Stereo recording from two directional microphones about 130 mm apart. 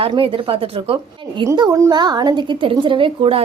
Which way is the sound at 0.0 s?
45° right (ahead or behind).